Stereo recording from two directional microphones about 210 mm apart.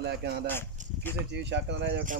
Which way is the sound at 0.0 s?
50° right (ahead or behind).